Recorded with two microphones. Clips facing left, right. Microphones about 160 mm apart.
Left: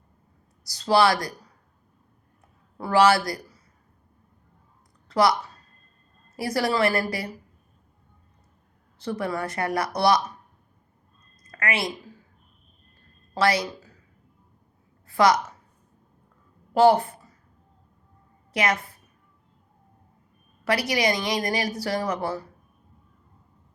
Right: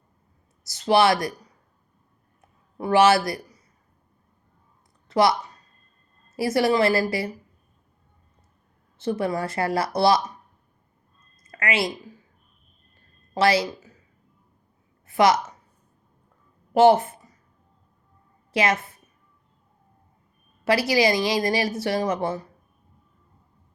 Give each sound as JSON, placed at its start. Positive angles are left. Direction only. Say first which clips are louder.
{"t": 0.6, "sound": "speech", "louder": "right 1 dB", "side_deg": -25}
{"t": 2.7, "sound": "speech", "louder": "right 1 dB", "side_deg": -20}
{"t": 5.0, "sound": "a sound", "louder": "right 1 dB", "side_deg": -25}
{"t": 6.3, "sound": "a woman's voice", "louder": "right 4 dB", "side_deg": -25}
{"t": 9.0, "sound": "a woman's voice", "louder": "right 3 dB", "side_deg": -25}
{"t": 11.5, "sound": "a woman's voice", "louder": "right 3 dB", "side_deg": -25}
{"t": 13.3, "sound": "speech", "louder": "right 2 dB", "side_deg": -25}
{"t": 15.0, "sound": "a woman's voice", "louder": "right 1 dB", "side_deg": -25}
{"t": 16.7, "sound": "speech", "louder": "right 2 dB", "side_deg": -25}
{"t": 18.5, "sound": "a woman's voice", "louder": "right 2 dB", "side_deg": -25}
{"t": 20.7, "sound": "a woman's voice", "louder": "right 4 dB", "side_deg": -25}